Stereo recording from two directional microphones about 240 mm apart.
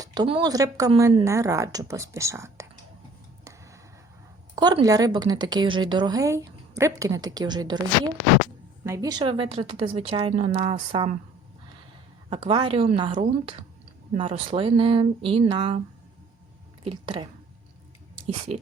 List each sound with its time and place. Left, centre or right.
0.0 s speech: centre
4.5 s speech: centre
8.8 s a woman's voice: centre
12.3 s a woman's voice: right
16.8 s speech: right
18.5 s a woman's voice: right